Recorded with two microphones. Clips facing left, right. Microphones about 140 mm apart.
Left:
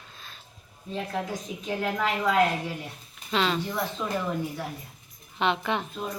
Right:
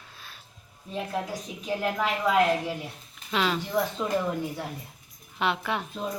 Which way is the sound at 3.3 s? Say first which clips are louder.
Left 1 dB; 10° right (ahead or behind).